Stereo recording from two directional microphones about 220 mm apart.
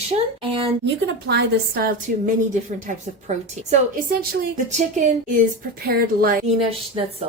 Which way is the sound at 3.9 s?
45° right (ahead or behind).